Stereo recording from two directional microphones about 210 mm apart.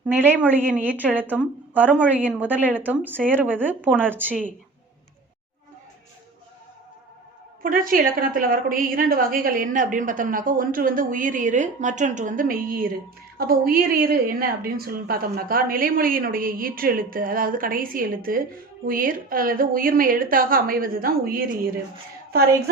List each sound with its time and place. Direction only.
0.4 s a woman's voice: 10° right (ahead or behind)
7.6 s a woman's voice: 40° right (ahead or behind)